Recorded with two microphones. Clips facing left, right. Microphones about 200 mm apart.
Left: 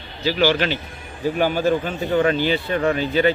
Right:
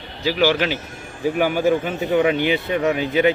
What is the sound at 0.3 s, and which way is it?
Speech, 5° right (ahead or behind).